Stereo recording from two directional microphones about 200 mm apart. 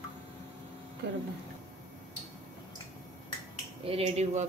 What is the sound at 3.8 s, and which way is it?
Speech, 30° right (ahead or behind).